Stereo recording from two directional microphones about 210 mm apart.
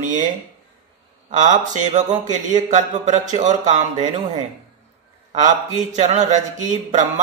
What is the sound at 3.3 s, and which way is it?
Speech, 35° right (ahead or behind).